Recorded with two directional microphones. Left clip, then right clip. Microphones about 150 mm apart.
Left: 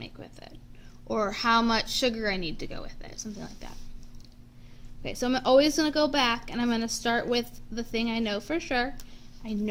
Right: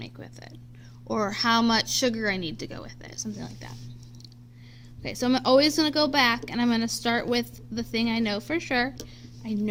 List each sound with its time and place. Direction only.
0.0 s a sound: 45° right (ahead or behind)
1.0 s a woman's voice: 50° right (ahead or behind)
5.0 s a woman's voice: 50° right (ahead or behind)
9.4 s a woman's voice: 35° right (ahead or behind)